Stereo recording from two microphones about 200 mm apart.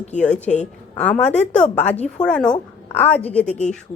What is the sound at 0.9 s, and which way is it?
A woman's voice, 5° left (ahead or behind).